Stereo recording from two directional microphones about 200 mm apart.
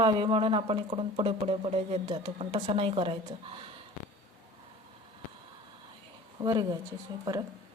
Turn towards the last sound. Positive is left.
turn(degrees=-20)  # may be behind; listen again after turning